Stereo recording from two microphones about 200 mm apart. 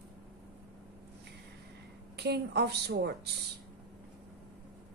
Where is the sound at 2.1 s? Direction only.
55° right (ahead or behind).